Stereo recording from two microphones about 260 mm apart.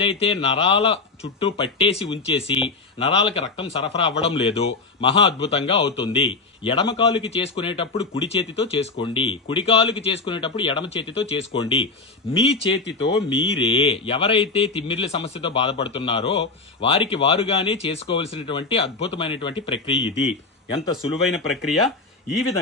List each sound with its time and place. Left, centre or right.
0.0 s speech: left
20.7 s speech: centre